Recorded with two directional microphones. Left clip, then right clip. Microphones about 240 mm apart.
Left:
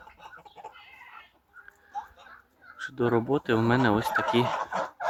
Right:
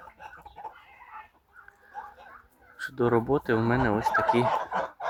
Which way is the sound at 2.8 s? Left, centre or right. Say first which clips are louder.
Right 1 dB; centre.